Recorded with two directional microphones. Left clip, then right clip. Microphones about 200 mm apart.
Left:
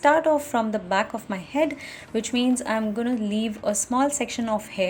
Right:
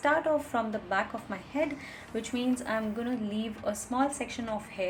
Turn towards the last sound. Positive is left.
turn(degrees=40)  # may be behind; listen again after turning